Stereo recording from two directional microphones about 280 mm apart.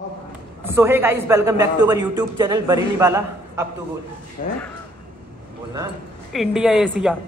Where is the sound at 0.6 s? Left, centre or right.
Centre.